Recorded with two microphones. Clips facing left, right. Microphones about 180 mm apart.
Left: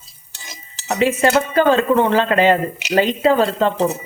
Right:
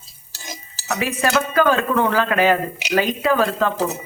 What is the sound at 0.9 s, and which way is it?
Dishes, 25° left (ahead or behind).